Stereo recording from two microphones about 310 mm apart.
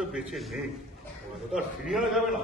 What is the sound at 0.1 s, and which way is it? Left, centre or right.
A man's voice, centre.